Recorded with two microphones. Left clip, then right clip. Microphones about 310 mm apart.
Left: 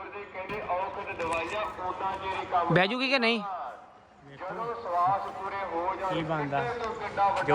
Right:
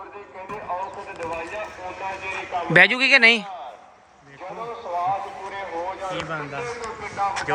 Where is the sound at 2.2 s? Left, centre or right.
Right.